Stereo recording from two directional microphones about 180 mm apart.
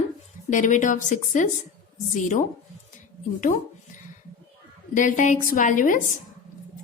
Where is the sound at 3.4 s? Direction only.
45° left (ahead or behind).